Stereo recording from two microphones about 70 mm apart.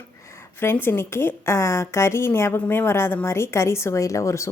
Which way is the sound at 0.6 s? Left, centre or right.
Left.